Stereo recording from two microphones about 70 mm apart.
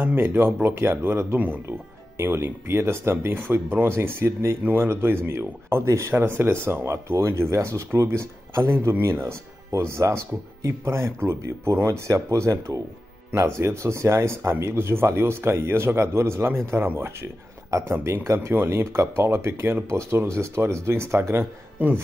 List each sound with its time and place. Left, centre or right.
0.0 s speech: right
8.7 s speech: right
9.0 s speech: right
17.6 s speech: right
17.9 s speech: right